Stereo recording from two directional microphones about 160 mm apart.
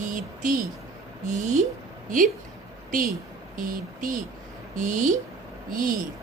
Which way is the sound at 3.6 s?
60° right (ahead or behind).